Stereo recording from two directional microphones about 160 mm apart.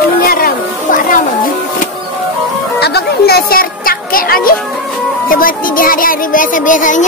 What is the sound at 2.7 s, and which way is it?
Music, 90° left.